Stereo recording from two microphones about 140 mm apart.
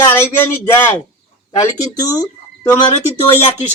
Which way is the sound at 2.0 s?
25° left (ahead or behind).